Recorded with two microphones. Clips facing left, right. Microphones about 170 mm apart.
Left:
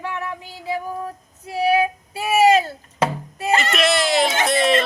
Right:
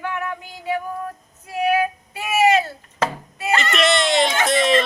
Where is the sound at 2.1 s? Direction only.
30° left (ahead or behind).